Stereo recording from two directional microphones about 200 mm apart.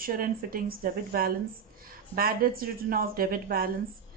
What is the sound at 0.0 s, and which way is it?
A woman's voice, 45° right (ahead or behind).